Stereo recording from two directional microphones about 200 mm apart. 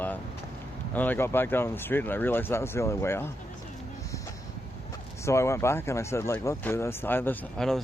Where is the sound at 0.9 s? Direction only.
10° left (ahead or behind).